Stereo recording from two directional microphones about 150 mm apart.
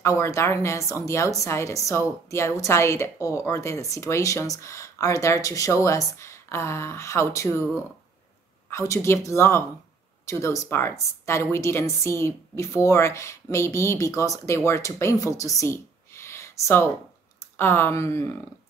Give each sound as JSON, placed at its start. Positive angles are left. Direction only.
{"t": 0.0, "sound": "a woman's voice", "side_deg": 20}
{"t": 8.6, "sound": "a woman's voice", "side_deg": 20}